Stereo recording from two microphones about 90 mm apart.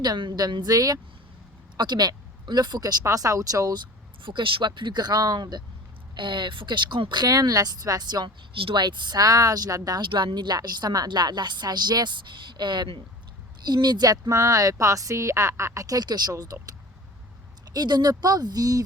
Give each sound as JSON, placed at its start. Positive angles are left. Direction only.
{"t": 0.0, "sound": "speech", "side_deg": -55}
{"t": 3.0, "sound": "speech", "side_deg": -40}
{"t": 6.1, "sound": "speech", "side_deg": -60}
{"t": 8.5, "sound": "speech", "side_deg": -70}
{"t": 10.1, "sound": "speech", "side_deg": -65}
{"t": 17.7, "sound": "speech", "side_deg": -50}